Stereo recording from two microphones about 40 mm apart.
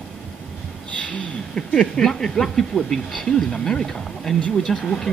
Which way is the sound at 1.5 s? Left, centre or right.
Centre.